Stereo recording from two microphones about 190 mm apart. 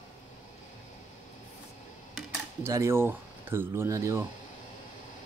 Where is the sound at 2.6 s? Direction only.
15° right (ahead or behind).